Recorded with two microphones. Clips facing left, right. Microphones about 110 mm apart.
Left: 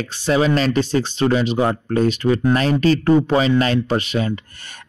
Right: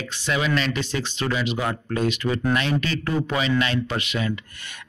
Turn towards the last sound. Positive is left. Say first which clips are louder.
# left 6 dB
turn(degrees=35)  # may be behind; listen again after turning